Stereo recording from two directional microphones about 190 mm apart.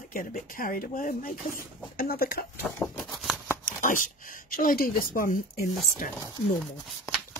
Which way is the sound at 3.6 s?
45° left (ahead or behind).